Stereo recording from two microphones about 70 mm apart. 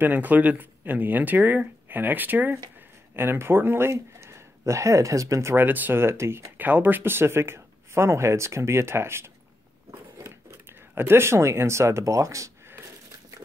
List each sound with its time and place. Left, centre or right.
0.0 s speech: right
5.6 s speech: right
6.5 s speech: right
9.8 s a sound: right